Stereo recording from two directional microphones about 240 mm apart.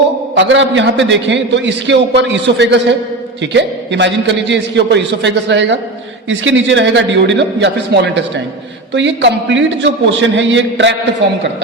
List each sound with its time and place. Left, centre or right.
0.3 s a man's voice: right